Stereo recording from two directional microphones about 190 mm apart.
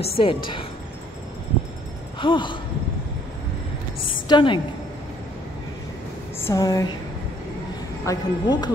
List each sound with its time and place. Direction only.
0.0 s a woman's voice: 30° left (ahead or behind)
2.1 s a woman's voice: 25° left (ahead or behind)
4.0 s a sound: 25° left (ahead or behind)
6.4 s a woman's voice: 20° left (ahead or behind)
8.0 s a woman's voice: 20° left (ahead or behind)